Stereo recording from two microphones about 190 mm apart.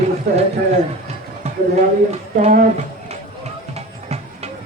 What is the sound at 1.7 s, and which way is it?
Speech, 35° right (ahead or behind).